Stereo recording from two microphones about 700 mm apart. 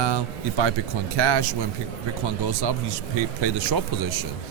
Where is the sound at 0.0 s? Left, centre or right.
Right.